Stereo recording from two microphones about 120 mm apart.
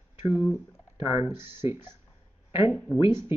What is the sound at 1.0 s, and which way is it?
Speech, 45° left (ahead or behind).